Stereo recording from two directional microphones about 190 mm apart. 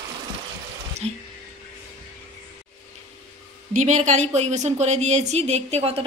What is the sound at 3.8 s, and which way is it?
A woman's voice, 40° right (ahead or behind).